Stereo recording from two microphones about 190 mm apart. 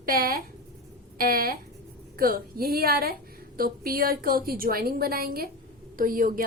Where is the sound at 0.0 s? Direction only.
50° right (ahead or behind).